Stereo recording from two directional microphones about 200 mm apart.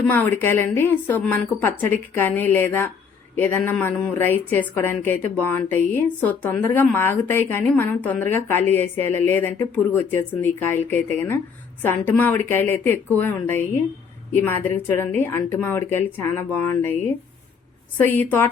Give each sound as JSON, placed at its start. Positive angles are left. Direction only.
{"t": 0.1, "sound": "a woman's voice", "side_deg": 10}
{"t": 17.9, "sound": "a woman's voice", "side_deg": 10}